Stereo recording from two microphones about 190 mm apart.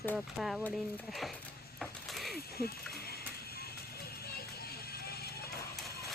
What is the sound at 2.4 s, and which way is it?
Music, 55° left (ahead or behind).